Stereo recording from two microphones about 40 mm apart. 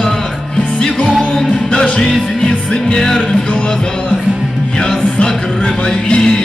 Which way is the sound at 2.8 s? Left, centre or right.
Centre.